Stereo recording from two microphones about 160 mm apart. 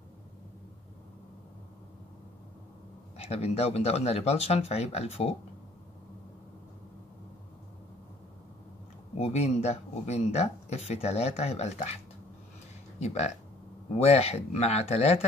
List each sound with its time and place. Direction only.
3.2 s speech: 40° left (ahead or behind)
9.1 s speech: 40° left (ahead or behind)
13.0 s speech: 45° left (ahead or behind)